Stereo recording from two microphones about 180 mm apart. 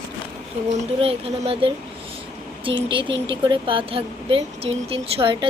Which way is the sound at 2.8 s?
30° right (ahead or behind).